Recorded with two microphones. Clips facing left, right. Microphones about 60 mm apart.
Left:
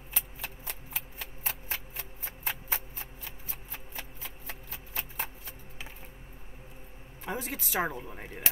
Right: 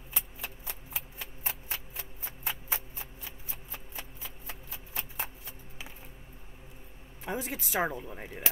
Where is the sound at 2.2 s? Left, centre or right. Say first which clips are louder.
Left 1 dB; left.